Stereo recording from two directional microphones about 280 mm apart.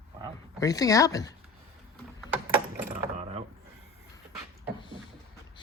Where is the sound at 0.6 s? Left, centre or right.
Centre.